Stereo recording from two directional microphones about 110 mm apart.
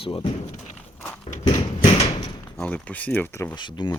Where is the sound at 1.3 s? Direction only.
75° left (ahead or behind).